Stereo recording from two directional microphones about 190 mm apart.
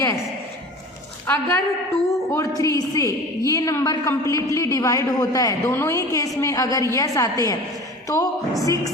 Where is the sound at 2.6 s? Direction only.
15° left (ahead or behind).